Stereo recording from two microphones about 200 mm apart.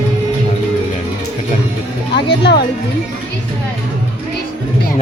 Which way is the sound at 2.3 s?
55° left (ahead or behind).